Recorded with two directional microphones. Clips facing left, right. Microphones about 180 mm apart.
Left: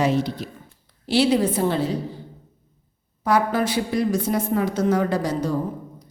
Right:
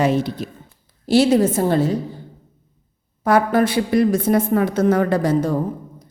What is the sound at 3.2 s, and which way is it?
A woman's voice, 50° right (ahead or behind).